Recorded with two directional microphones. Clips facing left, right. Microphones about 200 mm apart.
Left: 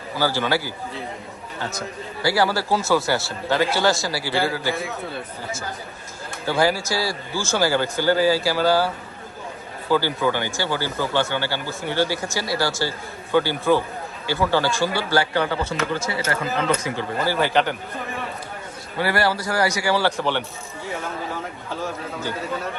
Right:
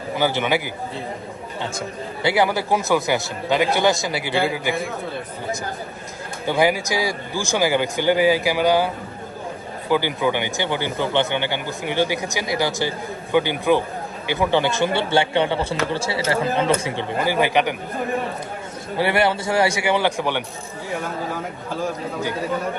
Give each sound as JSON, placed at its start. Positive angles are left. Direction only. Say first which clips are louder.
{"t": 0.2, "sound": "speech", "louder": "right 1 dB", "side_deg": -20}
{"t": 2.2, "sound": "speech", "louder": "right 1 dB", "side_deg": -20}
{"t": 6.4, "sound": "speech", "louder": "right 2 dB", "side_deg": -15}
{"t": 9.9, "sound": "speech", "louder": "right 1 dB", "side_deg": -15}
{"t": 17.2, "sound": "speech", "louder": "right 1 dB", "side_deg": -15}
{"t": 18.9, "sound": "speech", "louder": "right 2 dB", "side_deg": -20}
{"t": 21.8, "sound": "speech", "louder": "right 4 dB", "side_deg": -15}